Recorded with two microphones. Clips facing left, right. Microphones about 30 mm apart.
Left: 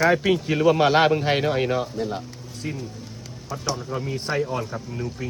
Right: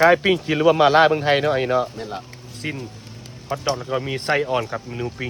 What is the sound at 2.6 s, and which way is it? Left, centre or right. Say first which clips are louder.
Speech: right 3 dB; right.